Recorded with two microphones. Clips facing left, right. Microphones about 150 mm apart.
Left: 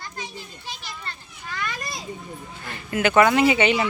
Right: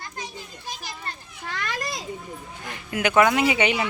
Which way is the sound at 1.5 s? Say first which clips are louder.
Right 1 dB; 80° right.